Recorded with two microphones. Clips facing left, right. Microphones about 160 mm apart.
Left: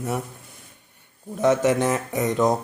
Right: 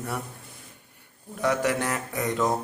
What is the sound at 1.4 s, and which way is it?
A man's voice, 20° left (ahead or behind).